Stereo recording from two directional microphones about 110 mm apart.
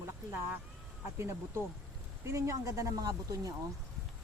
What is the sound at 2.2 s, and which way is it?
A woman's voice, 25° right (ahead or behind).